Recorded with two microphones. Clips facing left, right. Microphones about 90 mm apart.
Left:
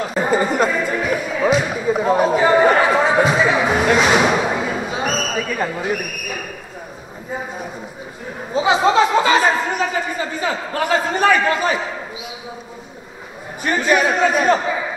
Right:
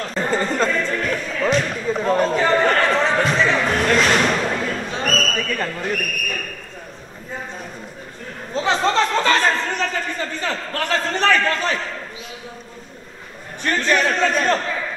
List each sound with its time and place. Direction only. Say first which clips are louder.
0.0 s music: left 4 dB; 10° left (ahead or behind)
7.3 s a sound: left 4 dB; 5° left (ahead or behind)
13.6 s a man's voice: left 3 dB; 10° left (ahead or behind)